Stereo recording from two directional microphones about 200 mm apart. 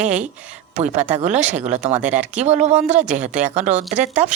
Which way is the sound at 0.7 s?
35° right (ahead or behind).